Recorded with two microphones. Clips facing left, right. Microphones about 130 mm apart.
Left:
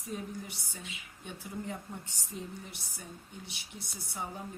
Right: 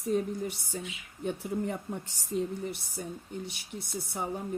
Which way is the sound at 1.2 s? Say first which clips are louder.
Right 9 dB; 60° right (ahead or behind).